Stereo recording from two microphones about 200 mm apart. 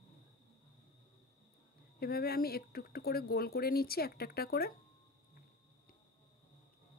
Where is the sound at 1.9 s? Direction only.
50° left (ahead or behind).